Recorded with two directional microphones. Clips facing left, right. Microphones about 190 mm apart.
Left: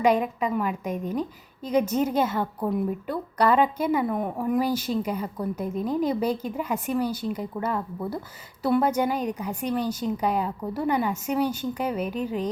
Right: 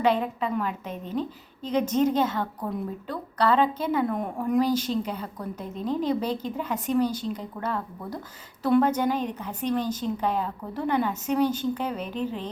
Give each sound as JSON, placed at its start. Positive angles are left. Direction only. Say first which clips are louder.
{"t": 0.0, "sound": "a woman's voice", "louder": "left 2 dB", "side_deg": 10}